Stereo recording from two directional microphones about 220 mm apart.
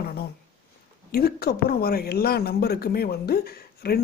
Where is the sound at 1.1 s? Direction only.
45° left (ahead or behind).